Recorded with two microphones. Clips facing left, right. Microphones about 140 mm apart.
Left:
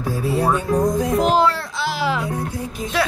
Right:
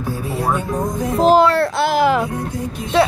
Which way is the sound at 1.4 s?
60° right (ahead or behind).